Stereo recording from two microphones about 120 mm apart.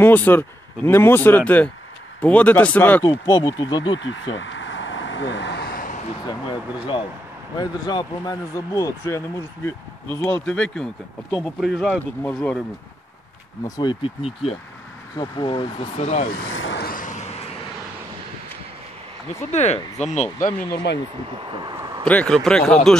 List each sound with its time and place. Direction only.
0.0 s speech: 15° left (ahead or behind)
3.0 s speech: 30° left (ahead or behind)
6.2 s speech: 40° left (ahead or behind); by 9.2 s 25° left (ahead or behind)
10.2 s speech: 10° left (ahead or behind)
11.9 s speech: 10° left (ahead or behind)
13.7 s speech: 30° left (ahead or behind)
14.0 s speech: 55° left (ahead or behind)
15.1 s speech: 40° left (ahead or behind)
16.0 s speech: 70° left (ahead or behind)
17.0 s vehicle: 90° left
19.5 s speech: 70° left (ahead or behind)
20.0 s speech: 80° left
21.7 s a sound: 25° right (ahead or behind)
22.0 s speech: 10° left (ahead or behind)